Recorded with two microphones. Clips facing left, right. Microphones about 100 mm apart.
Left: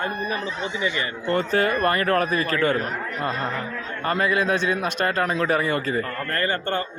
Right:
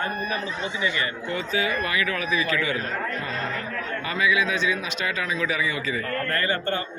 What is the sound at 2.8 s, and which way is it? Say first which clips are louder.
Speech: left 1 dB; 20° left (ahead or behind).